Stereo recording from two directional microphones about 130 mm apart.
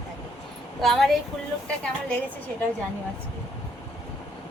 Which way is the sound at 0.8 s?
Centre (ahead or behind).